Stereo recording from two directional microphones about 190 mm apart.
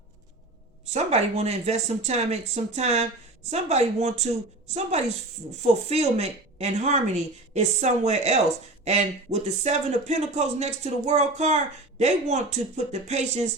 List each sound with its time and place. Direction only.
0.9 s speech: 35° right (ahead or behind)